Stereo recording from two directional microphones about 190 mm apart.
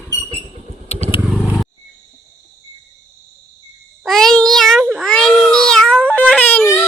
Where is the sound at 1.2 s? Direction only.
5° right (ahead or behind).